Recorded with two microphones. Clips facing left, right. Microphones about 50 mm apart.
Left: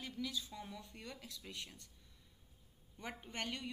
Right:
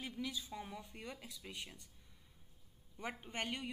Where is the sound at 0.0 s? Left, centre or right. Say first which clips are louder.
Even; centre.